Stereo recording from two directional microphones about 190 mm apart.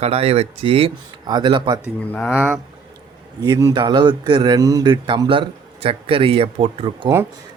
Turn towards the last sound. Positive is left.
turn(degrees=-30)  # may be behind; listen again after turning